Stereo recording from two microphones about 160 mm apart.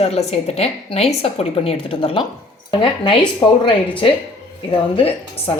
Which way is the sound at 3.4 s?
30° left (ahead or behind).